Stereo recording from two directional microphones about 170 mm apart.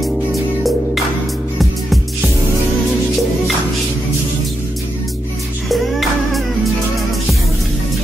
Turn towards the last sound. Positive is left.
turn(degrees=0)  # may be behind; listen again after turning